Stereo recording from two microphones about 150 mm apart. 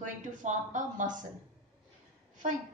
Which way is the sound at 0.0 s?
55° right (ahead or behind).